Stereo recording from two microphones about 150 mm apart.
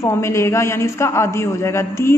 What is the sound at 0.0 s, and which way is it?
A man's voice, 20° left (ahead or behind).